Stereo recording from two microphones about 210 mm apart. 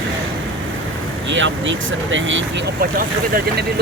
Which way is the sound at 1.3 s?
60° right (ahead or behind).